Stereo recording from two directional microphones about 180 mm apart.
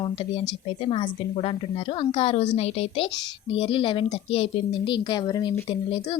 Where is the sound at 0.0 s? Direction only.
30° left (ahead or behind).